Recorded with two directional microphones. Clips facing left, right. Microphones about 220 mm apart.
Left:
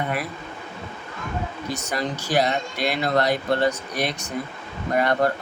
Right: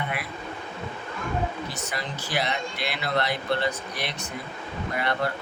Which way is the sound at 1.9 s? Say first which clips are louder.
Left 9 dB; 40° left (ahead or behind).